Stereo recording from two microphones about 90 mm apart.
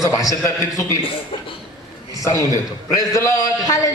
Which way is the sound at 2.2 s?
40° left (ahead or behind).